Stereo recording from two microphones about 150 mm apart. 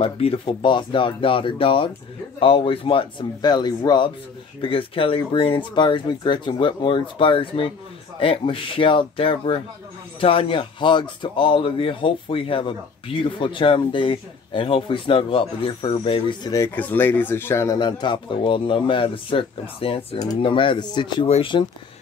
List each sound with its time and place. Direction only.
0.0 s speech: 40° left (ahead or behind)
16.5 s speech: 15° left (ahead or behind)
17.7 s speech: 30° left (ahead or behind)